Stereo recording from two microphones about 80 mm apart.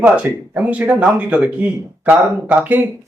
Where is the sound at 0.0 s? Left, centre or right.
Right.